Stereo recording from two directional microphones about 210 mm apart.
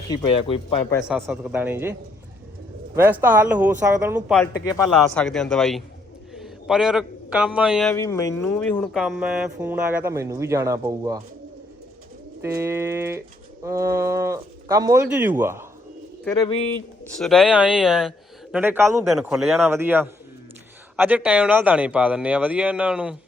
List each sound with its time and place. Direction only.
0.1 s speech: 25° left (ahead or behind)
1.0 s speech: 5° right (ahead or behind)
4.6 s speech: 15° left (ahead or behind)
4.9 s a man's voice: 5° left (ahead or behind)
7.9 s speech: 15° left (ahead or behind); by 11.2 s 15° right (ahead or behind)
12.4 s speech: 10° right (ahead or behind)
16.2 s speech: 10° left (ahead or behind)
17.1 s speech: centre (ahead or behind)